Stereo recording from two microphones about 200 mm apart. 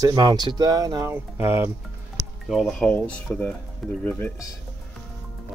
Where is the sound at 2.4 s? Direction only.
Centre (ahead or behind).